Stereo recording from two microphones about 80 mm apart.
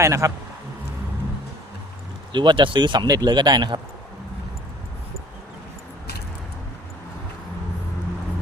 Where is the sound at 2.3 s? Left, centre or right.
Right.